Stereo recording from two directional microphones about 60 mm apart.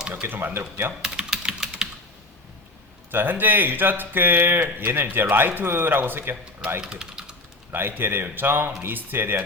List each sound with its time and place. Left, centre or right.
0.1 s speech: right
1.0 s typing: centre
3.1 s speech: right
6.8 s a sound: centre
7.7 s speech: right